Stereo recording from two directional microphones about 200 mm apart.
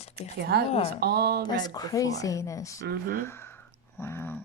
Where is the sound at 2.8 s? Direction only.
50° right (ahead or behind).